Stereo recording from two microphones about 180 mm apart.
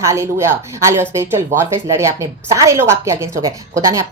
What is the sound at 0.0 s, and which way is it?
A woman's voice, 15° right (ahead or behind).